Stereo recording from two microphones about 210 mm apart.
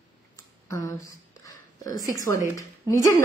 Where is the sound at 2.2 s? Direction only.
15° left (ahead or behind).